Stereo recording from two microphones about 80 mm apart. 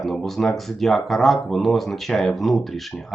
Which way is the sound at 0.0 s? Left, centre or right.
Centre.